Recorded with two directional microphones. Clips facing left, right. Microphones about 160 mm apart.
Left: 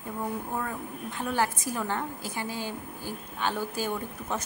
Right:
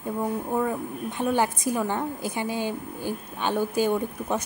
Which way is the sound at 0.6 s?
20° right (ahead or behind).